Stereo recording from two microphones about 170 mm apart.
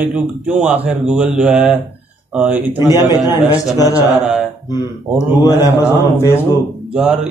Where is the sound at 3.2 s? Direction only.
20° left (ahead or behind).